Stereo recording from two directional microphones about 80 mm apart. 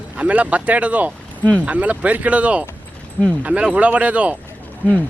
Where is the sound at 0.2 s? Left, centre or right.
Centre.